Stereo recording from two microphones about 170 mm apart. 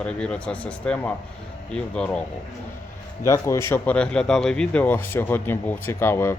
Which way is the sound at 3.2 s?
15° left (ahead or behind).